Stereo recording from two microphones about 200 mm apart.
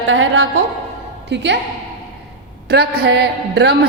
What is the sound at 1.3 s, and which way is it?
Speech, 60° right (ahead or behind).